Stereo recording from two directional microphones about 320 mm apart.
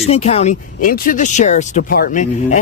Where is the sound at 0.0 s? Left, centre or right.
Centre.